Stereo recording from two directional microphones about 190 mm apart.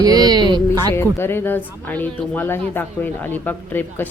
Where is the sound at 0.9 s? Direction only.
10° left (ahead or behind).